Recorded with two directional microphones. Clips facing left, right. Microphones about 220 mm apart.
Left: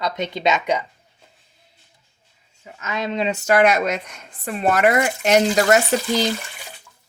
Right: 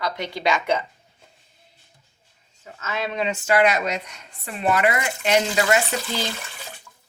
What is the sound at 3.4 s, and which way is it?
Speech, 45° left (ahead or behind).